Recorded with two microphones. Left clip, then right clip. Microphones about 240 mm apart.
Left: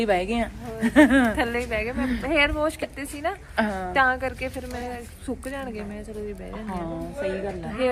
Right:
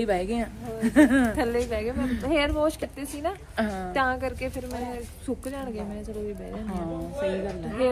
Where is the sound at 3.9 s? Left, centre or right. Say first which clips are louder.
Left 5 dB; centre.